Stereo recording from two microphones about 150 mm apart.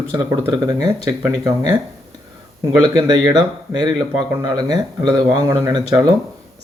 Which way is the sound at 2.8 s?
25° right (ahead or behind).